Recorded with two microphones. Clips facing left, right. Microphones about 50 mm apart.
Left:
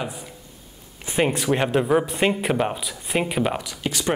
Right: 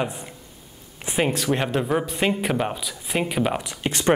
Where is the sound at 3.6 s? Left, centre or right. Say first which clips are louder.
Right 1 dB; right.